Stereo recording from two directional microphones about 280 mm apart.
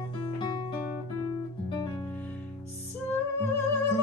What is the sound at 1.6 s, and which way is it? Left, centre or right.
Music, centre.